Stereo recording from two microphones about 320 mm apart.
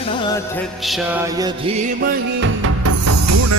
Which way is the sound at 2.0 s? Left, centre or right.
Right.